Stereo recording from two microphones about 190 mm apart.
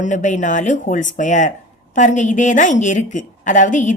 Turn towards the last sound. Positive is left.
turn(degrees=40)  # may be behind; listen again after turning